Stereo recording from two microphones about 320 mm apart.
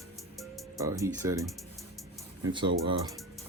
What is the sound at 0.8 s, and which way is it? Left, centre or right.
Speech, centre.